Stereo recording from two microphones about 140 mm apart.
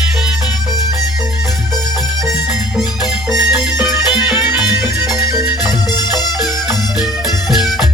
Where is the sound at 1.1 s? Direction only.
5° right (ahead or behind).